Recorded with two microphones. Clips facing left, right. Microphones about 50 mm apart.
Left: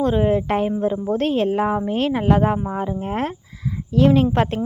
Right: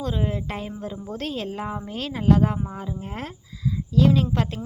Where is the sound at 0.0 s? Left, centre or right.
Left.